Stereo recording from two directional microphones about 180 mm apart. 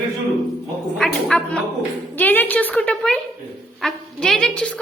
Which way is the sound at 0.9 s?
5° left (ahead or behind).